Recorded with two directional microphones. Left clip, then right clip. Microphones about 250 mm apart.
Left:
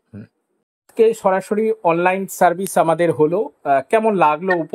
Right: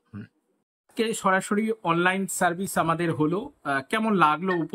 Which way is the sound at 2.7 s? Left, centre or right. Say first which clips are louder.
Left 10 dB; left.